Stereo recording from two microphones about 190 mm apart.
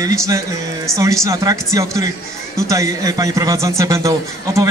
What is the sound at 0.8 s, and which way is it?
A man's voice, 15° right (ahead or behind).